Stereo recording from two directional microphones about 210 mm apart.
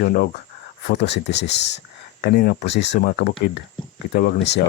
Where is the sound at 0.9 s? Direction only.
55° left (ahead or behind).